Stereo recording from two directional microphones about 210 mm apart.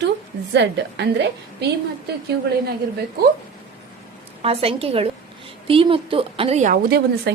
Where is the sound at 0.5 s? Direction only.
55° right (ahead or behind).